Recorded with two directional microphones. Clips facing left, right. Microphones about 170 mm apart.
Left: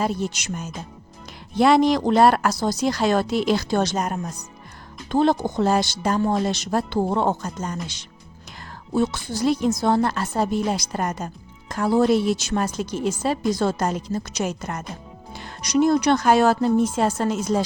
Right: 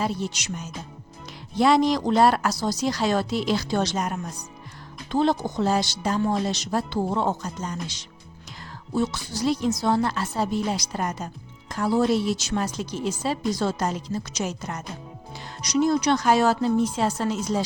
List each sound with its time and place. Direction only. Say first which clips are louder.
0.0 s a woman's voice: left 3 dB; 50° left (ahead or behind)
5.1 s a woman's voice: left 3 dB; 55° left (ahead or behind)